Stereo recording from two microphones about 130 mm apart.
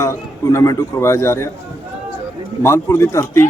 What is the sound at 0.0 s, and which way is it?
A man's voice, 25° left (ahead or behind).